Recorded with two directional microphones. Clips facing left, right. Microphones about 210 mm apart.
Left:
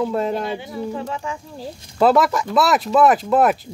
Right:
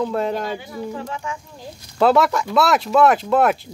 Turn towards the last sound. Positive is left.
turn(degrees=0)  # may be behind; listen again after turning